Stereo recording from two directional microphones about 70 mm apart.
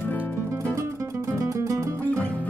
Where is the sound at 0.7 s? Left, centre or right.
Right.